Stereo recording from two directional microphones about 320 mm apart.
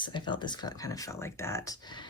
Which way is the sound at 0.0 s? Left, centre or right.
Centre.